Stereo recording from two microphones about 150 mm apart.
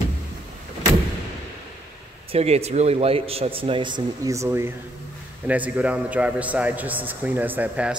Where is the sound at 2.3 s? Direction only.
45° right (ahead or behind).